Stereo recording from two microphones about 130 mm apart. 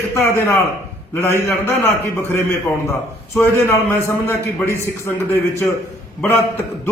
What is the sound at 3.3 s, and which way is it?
A man's voice, 20° left (ahead or behind).